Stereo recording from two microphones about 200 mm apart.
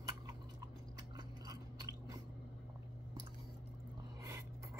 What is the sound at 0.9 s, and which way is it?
Chewing, 20° right (ahead or behind).